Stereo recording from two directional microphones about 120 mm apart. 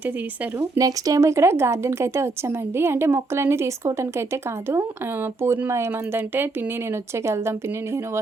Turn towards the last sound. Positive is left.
turn(degrees=-20)  # may be behind; listen again after turning